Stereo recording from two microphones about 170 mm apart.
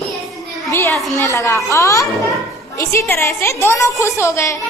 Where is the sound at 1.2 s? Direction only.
15° left (ahead or behind).